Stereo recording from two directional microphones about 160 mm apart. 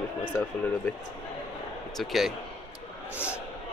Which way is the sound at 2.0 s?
Centre (ahead or behind).